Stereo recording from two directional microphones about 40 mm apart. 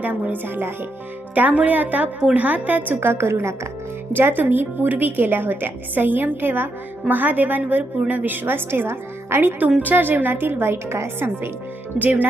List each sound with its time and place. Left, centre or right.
0.0 s a woman's voice: right
0.4 s a woman's voice: right
1.4 s a woman's voice: right
4.1 s a woman's voice: right
9.8 s a woman's voice: right
10.6 s a woman's voice: right
11.9 s speech: centre